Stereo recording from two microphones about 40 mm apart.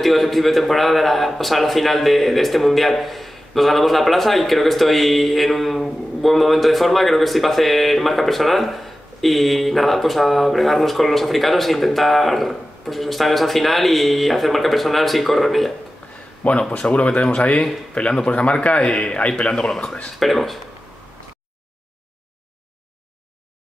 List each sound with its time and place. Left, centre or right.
0.0 s a man's voice: centre
16.4 s a man's voice: left
19.5 s speech: centre
20.2 s a man's voice: centre